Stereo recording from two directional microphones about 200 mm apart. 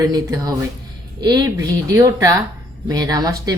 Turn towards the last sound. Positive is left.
turn(degrees=-20)  # may be behind; listen again after turning